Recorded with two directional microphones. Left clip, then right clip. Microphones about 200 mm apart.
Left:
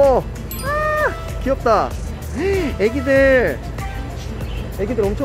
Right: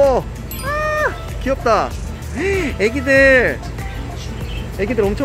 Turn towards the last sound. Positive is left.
turn(degrees=-20)  # may be behind; listen again after turning